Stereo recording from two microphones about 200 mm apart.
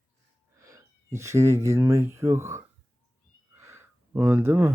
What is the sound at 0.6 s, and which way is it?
Speech, 15° right (ahead or behind).